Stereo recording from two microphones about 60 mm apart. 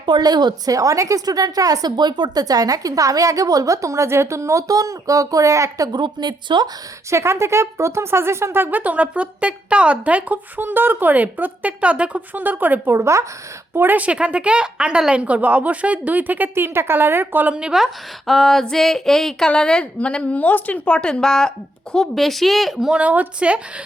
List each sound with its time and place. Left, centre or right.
0.2 s a woman's voice: right
7.1 s speech: right
8.8 s speech: right
12.9 s speech: right
13.7 s speech: right
17.5 s a woman's voice: centre
17.7 s a woman's voice: centre
22.9 s speech: right